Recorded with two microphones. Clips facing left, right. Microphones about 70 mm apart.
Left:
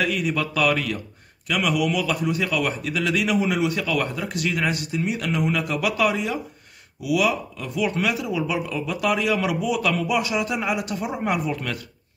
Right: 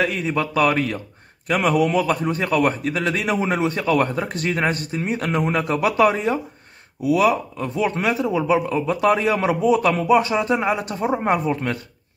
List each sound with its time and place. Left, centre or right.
0.0 s a man's voice: right